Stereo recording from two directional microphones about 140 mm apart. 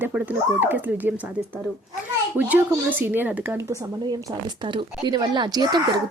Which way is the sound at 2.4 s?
10° right (ahead or behind).